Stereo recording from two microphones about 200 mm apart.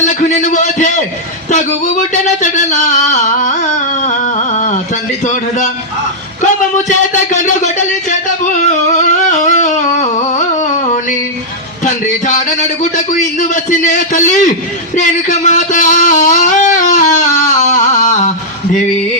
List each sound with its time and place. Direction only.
0.0 s a man's voice: 40° left (ahead or behind)
2.2 s a sound: 35° left (ahead or behind)
11.9 s speech: 40° left (ahead or behind)